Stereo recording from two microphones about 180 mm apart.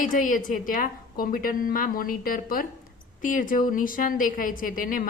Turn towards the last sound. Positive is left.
turn(degrees=50)  # may be behind; listen again after turning